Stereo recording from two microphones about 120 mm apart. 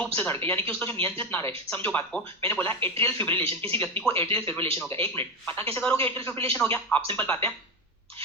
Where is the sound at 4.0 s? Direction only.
45° right (ahead or behind).